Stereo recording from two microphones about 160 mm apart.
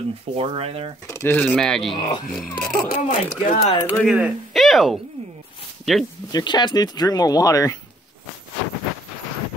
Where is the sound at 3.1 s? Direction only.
50° left (ahead or behind).